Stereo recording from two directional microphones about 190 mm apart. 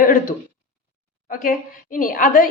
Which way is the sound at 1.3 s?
45° left (ahead or behind).